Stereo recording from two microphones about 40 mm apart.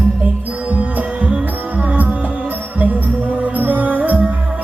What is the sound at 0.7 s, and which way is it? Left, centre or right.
Music, right.